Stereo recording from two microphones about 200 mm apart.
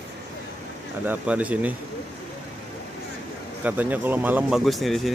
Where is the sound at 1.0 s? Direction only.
5° right (ahead or behind).